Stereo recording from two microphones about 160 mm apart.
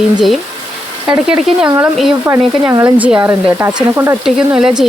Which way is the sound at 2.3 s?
15° right (ahead or behind).